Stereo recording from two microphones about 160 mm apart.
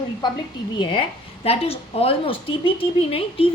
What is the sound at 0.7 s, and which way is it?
A woman's voice, 30° left (ahead or behind).